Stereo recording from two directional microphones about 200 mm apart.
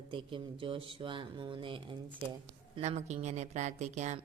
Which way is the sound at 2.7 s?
35° right (ahead or behind).